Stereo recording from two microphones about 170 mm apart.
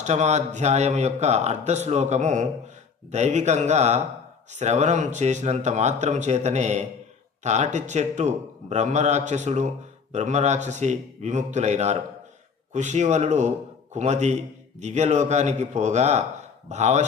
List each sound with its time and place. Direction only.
0.0 s speech: 40° right (ahead or behind)